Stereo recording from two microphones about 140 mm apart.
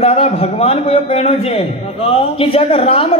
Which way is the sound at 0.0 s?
45° left (ahead or behind).